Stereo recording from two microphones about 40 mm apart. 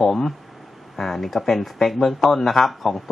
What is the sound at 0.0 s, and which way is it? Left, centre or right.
Speech, centre.